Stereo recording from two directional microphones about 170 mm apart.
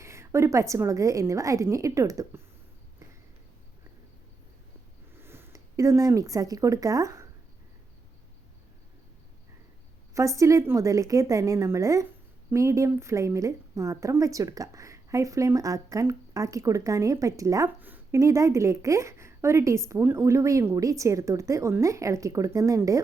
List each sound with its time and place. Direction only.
0.0 s a woman's voice: 15° right (ahead or behind)
5.1 s speech: 15° right (ahead or behind)
10.2 s a woman's voice: 20° right (ahead or behind)